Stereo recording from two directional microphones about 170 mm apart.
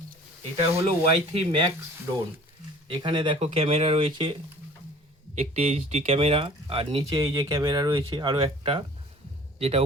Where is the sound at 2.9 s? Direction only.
25° right (ahead or behind).